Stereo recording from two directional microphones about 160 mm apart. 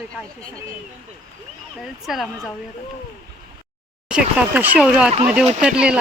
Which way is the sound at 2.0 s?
Centre (ahead or behind).